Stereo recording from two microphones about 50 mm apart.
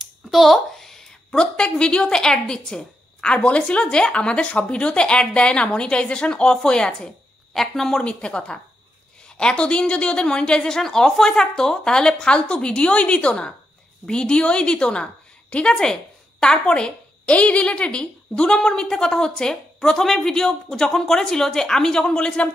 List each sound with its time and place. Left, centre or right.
0.0 s speech: centre
7.5 s speech: centre
8.0 s speech: left